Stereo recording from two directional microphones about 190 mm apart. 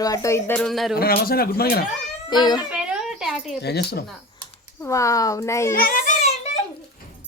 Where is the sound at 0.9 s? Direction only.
50° left (ahead or behind).